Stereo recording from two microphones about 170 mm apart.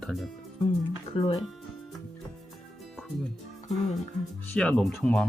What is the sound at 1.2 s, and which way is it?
Speech, 30° left (ahead or behind).